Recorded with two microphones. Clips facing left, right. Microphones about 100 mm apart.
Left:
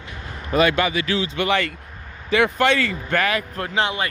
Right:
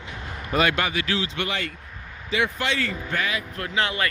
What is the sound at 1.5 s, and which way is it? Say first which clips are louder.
Speech: left 9 dB; 70° left (ahead or behind).